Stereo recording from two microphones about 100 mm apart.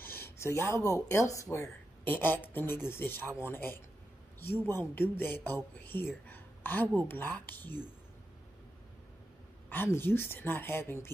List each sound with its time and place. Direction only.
0.0 s a sound: 25° left (ahead or behind)
1.1 s speech: 35° left (ahead or behind)
2.0 s a woman's voice: 20° left (ahead or behind)
5.9 s a sound: 20° left (ahead or behind)
7.0 s a woman's voice: 20° left (ahead or behind)
9.7 s a woman's voice: 20° left (ahead or behind)